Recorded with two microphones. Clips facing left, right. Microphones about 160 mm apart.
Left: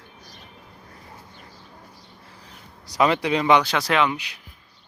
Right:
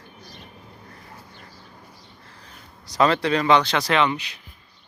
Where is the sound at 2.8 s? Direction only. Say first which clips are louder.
Right 1 dB; 10° left (ahead or behind).